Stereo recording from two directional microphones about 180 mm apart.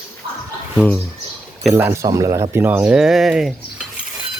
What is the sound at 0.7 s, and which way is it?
Speech, centre (ahead or behind).